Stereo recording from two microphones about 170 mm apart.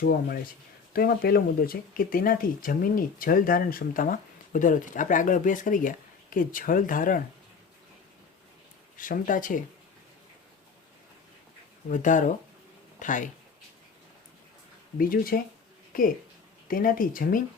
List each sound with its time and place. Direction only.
0.0 s speech: 55° left (ahead or behind)
9.0 s speech: 50° left (ahead or behind)
11.9 s speech: 50° left (ahead or behind)
14.9 s speech: 60° left (ahead or behind)